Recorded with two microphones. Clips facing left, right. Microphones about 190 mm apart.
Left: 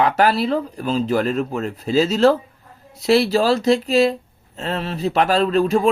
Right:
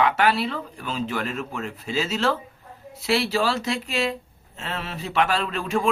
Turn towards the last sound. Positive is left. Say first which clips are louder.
# left 9 dB
turn(degrees=40)  # may be behind; listen again after turning